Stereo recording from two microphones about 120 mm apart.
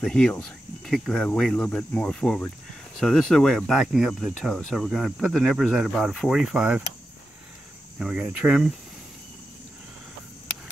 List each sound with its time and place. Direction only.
0.0 s speech: 5° left (ahead or behind); by 6.8 s 10° right (ahead or behind)
8.0 s speech: 10° right (ahead or behind)